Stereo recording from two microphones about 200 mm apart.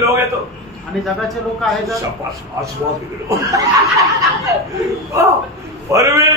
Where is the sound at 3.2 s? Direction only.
15° right (ahead or behind).